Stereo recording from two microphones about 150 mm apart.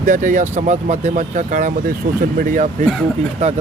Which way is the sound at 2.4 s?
70° right (ahead or behind).